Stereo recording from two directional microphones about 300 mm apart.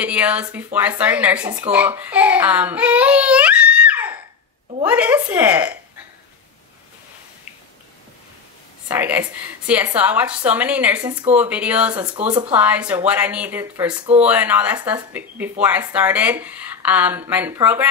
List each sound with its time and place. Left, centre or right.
0.0 s a woman's voice: centre
8.8 s a woman's voice: centre
12.2 s speech: right
12.5 s a woman's voice: centre